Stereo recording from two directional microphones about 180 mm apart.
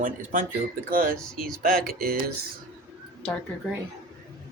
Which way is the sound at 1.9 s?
55° right (ahead or behind).